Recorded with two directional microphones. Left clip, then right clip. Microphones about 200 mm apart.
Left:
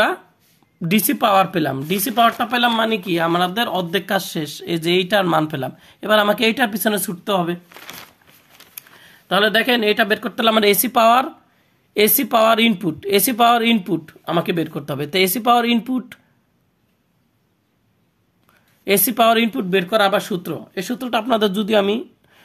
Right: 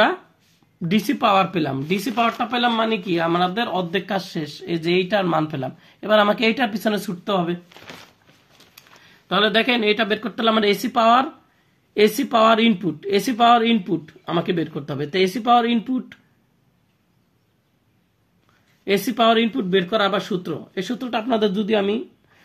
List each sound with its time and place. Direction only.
0.7 s speech: 35° left (ahead or behind)
8.5 s speech: 30° left (ahead or behind)
18.9 s speech: 35° left (ahead or behind)